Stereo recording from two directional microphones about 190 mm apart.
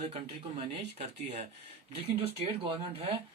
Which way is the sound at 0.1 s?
35° right (ahead or behind).